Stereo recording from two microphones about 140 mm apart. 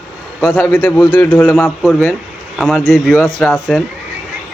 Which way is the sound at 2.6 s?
Centre (ahead or behind).